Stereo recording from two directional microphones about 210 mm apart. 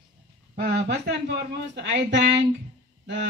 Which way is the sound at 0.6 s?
50° right (ahead or behind).